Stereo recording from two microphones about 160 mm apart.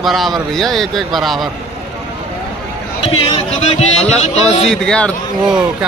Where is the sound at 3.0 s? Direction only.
35° left (ahead or behind).